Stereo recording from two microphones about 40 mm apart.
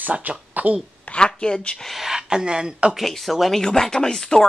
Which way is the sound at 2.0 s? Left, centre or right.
Centre.